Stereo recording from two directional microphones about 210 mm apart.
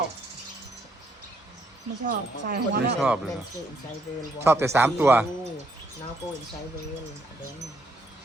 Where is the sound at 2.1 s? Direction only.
50° right (ahead or behind).